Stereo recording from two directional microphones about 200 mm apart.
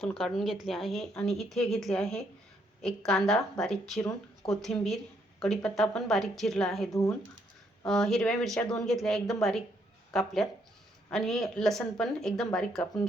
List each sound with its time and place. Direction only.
0.0 s a woman's voice: centre (ahead or behind)
6.9 s speech: 15° left (ahead or behind)
7.9 s a woman's voice: centre (ahead or behind)